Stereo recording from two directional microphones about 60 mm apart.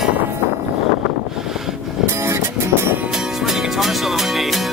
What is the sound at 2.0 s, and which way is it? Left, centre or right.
Music, right.